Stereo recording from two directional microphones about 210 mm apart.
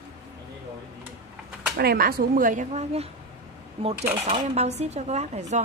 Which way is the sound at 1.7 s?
45° right (ahead or behind).